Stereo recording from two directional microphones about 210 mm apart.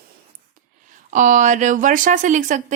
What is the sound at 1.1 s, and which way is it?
Speech, 35° right (ahead or behind).